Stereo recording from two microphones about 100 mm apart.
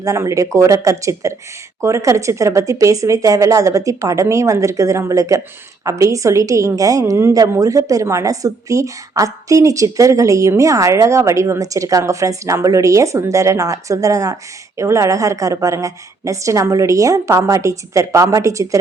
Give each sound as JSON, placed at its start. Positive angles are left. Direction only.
{"t": 0.0, "sound": "a woman's voice", "side_deg": -30}